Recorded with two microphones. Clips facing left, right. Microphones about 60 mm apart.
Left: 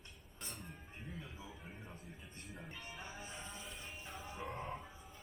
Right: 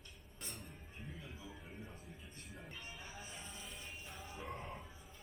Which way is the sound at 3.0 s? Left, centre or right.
Left.